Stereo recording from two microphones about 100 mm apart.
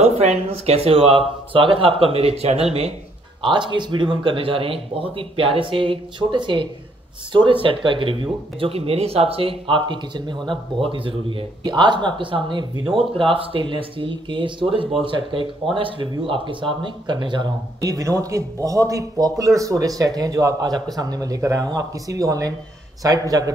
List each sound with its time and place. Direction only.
0.0 s speech: 90° right
3.4 s speech: 55° right (ahead or behind); by 23.5 s 35° right (ahead or behind)